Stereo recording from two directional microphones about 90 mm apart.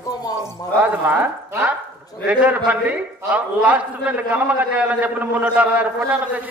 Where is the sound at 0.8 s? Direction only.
20° right (ahead or behind).